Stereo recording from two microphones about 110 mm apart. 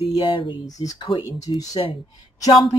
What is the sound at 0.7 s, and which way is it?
Speech, 35° left (ahead or behind).